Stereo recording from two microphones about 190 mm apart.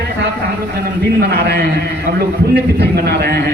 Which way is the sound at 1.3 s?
60° right (ahead or behind).